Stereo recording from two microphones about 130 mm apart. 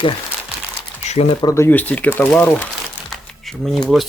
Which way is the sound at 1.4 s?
25° left (ahead or behind).